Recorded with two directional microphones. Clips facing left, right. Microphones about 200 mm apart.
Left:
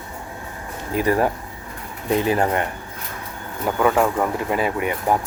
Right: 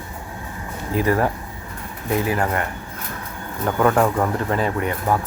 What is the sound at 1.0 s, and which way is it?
Speech, 20° left (ahead or behind).